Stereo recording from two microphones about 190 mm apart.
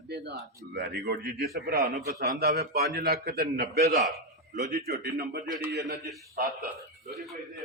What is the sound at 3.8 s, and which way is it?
Speech, 40° right (ahead or behind).